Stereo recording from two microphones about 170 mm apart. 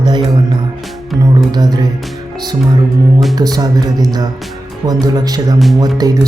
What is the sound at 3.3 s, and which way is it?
Speech, 20° right (ahead or behind).